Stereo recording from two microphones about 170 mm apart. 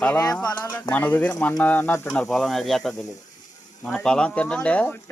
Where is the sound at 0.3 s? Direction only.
10° left (ahead or behind).